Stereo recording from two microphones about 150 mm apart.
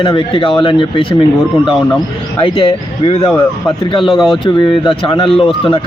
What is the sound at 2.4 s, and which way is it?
A man's voice, 35° left (ahead or behind).